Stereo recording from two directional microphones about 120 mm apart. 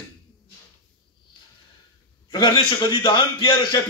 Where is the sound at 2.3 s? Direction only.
40° left (ahead or behind).